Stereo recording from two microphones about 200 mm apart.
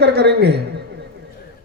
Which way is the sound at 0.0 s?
55° right (ahead or behind).